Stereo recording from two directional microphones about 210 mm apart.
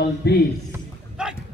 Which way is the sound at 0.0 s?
50° left (ahead or behind).